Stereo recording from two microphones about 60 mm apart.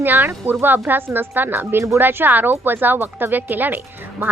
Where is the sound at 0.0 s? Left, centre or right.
Right.